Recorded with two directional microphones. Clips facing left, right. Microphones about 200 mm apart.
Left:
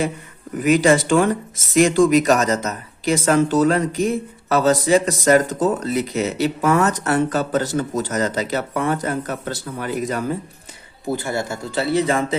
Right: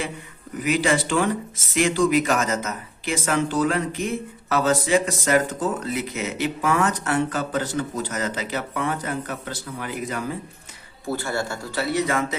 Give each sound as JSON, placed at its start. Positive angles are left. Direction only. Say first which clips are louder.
{"t": 0.6, "sound": "speech", "louder": "left 6 dB", "side_deg": 45}
{"t": 11.1, "sound": "speech", "louder": "left 3 dB", "side_deg": 15}